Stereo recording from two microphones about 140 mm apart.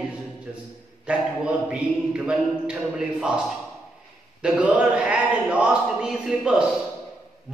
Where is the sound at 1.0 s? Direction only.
10° right (ahead or behind).